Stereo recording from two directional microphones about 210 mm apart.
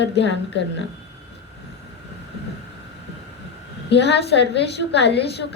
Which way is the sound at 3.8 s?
55° left (ahead or behind).